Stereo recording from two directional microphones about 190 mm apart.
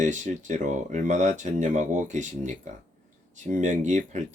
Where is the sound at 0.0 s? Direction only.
40° right (ahead or behind).